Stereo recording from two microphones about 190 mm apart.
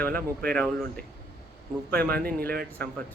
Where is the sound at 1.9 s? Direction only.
55° right (ahead or behind).